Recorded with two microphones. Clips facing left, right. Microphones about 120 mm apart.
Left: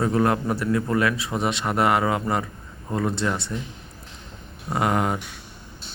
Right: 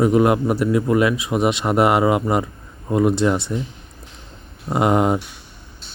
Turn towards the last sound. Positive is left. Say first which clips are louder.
# right 6 dB
turn(degrees=-20)  # may be behind; listen again after turning